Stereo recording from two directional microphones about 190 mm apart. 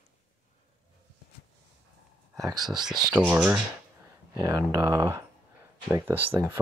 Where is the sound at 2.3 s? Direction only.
20° right (ahead or behind).